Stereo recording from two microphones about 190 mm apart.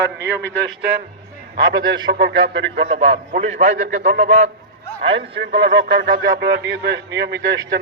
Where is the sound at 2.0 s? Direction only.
65° right (ahead or behind).